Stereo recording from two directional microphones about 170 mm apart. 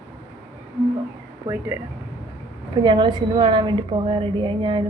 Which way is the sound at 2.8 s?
25° right (ahead or behind).